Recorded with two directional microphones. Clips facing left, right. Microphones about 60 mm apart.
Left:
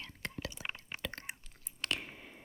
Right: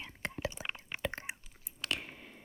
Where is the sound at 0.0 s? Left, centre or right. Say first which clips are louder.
Right 4 dB; right.